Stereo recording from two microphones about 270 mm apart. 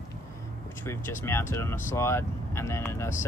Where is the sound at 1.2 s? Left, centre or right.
Centre.